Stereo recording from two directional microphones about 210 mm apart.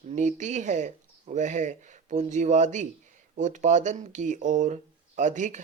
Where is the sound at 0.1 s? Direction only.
35° right (ahead or behind).